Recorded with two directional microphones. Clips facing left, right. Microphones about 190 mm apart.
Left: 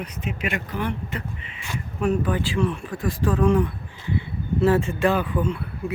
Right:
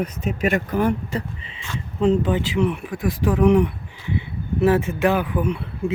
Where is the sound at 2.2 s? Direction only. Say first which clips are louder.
Right 3 dB; 20° right (ahead or behind).